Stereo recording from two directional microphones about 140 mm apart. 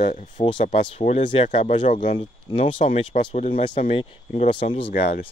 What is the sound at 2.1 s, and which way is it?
Speech, 40° left (ahead or behind).